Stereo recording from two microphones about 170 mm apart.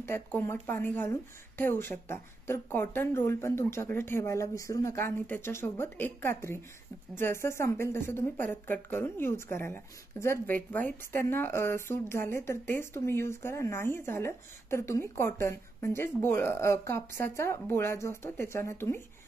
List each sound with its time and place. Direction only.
0.0 s a woman's voice: 15° left (ahead or behind)